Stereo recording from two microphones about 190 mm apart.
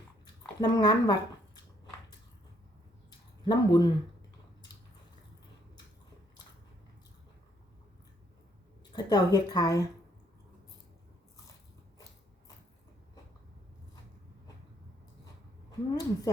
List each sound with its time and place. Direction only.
0.6 s a woman's voice: 20° left (ahead or behind)
3.4 s a woman's voice: 20° left (ahead or behind)
8.9 s a woman's voice: 20° left (ahead or behind)
15.9 s a woman's voice: 20° left (ahead or behind)